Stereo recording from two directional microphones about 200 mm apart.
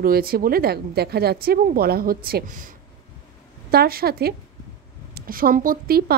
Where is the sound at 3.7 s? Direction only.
50° right (ahead or behind).